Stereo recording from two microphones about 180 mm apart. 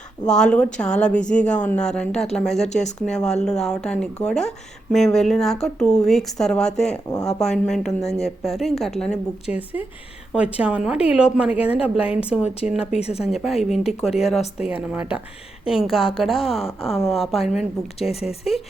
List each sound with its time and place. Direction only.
0.3 s a woman's voice: 5° left (ahead or behind)
13.0 s speech: 35° left (ahead or behind)
13.2 s a woman's voice: centre (ahead or behind)
16.6 s speech: 35° left (ahead or behind)
17.0 s speech: centre (ahead or behind)
18.1 s speech: 35° left (ahead or behind)